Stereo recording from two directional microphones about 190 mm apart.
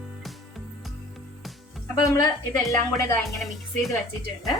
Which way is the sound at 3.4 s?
Centre (ahead or behind).